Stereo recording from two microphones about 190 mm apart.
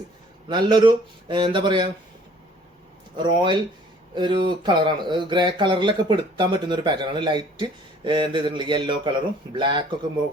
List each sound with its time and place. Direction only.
0.4 s speech: 25° right (ahead or behind)
3.2 s speech: 25° right (ahead or behind)